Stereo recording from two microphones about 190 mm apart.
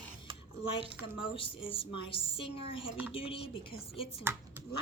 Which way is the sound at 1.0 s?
25° left (ahead or behind).